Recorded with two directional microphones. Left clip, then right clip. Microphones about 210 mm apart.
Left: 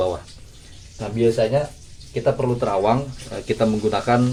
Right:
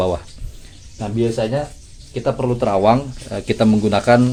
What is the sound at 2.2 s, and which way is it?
Speech, 45° right (ahead or behind).